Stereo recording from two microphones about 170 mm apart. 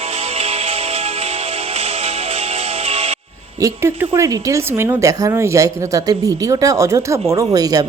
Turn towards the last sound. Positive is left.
turn(degrees=-20)  # may be behind; listen again after turning